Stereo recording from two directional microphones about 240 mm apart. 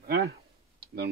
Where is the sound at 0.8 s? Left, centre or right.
Right.